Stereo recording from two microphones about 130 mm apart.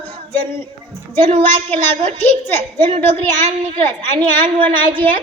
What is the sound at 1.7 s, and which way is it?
Speech, 55° right (ahead or behind).